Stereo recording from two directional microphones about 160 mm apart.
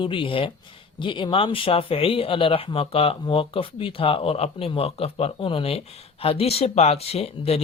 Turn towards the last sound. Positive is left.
turn(degrees=40)  # may be behind; listen again after turning